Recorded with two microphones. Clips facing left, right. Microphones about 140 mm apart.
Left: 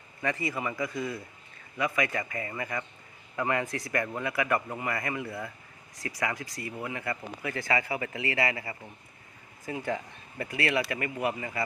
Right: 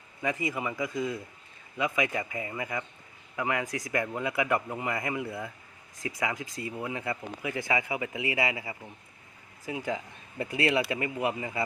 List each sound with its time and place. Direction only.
0.2 s speech: 10° right (ahead or behind)